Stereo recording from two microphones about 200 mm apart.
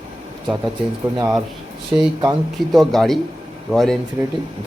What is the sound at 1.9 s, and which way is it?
Speech, 15° right (ahead or behind).